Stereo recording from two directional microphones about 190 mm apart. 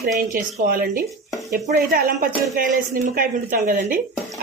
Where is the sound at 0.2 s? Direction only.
45° right (ahead or behind).